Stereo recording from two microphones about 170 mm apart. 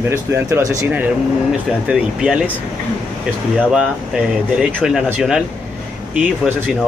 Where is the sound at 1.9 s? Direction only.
5° right (ahead or behind).